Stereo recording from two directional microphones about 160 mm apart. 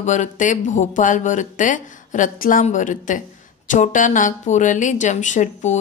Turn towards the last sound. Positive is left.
turn(degrees=50)  # may be behind; listen again after turning